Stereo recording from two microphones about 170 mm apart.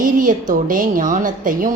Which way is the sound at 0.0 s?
50° right (ahead or behind).